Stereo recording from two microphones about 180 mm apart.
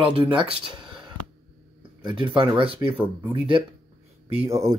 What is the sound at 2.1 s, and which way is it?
Speech, 25° right (ahead or behind).